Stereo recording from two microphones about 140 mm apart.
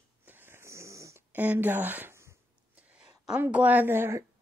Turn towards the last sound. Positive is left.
turn(degrees=-15)  # may be behind; listen again after turning